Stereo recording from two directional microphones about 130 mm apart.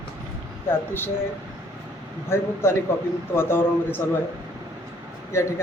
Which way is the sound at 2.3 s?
20° left (ahead or behind).